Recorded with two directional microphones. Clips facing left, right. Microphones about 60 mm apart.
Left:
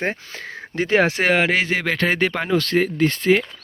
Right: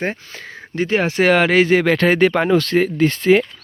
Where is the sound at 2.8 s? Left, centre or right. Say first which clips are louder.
Right 3 dB; right.